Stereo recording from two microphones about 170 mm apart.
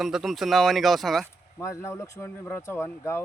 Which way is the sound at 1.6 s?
15° left (ahead or behind).